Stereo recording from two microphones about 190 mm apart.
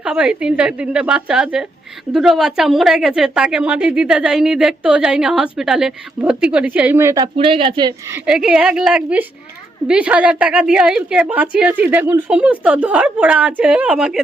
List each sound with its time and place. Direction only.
0.0 s a woman's voice: 5° right (ahead or behind)
7.3 s speech: 30° right (ahead or behind)
8.1 s a woman's voice: 5° right (ahead or behind)